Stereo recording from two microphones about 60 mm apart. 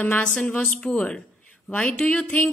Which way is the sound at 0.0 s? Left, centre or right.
Left.